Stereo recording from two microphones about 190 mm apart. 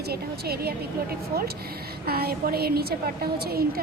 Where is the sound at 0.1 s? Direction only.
55° right (ahead or behind).